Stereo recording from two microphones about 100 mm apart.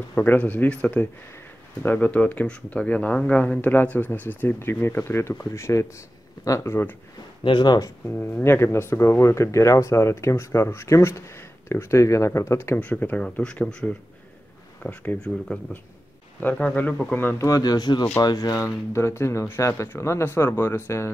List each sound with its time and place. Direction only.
0.1 s speech: 15° left (ahead or behind)
7.4 s speech: 50° left (ahead or behind)
8.1 s speech: 15° left (ahead or behind)
12.8 s speech: 15° left (ahead or behind)
17.5 s speech: 40° left (ahead or behind)
18.9 s speech: 25° left (ahead or behind)